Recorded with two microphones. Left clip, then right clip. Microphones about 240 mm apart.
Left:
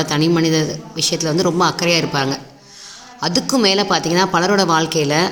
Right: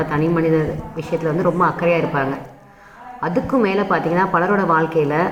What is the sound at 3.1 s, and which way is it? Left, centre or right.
Speech, left.